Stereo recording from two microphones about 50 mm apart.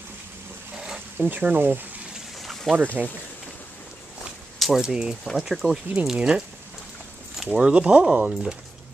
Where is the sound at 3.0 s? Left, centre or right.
Right.